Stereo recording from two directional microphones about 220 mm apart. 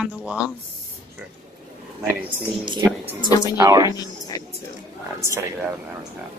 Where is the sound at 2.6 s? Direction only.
20° right (ahead or behind).